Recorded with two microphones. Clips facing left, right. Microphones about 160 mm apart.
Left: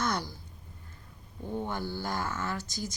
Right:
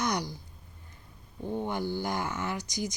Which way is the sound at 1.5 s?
15° right (ahead or behind).